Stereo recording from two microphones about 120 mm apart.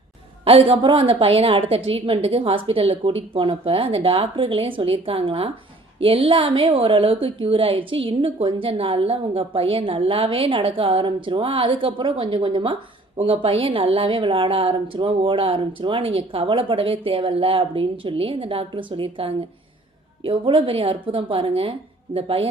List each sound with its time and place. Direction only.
0.4 s a woman's voice: 50° right (ahead or behind)